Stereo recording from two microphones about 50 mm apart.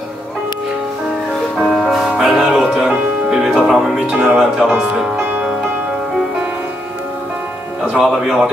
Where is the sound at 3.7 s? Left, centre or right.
Centre.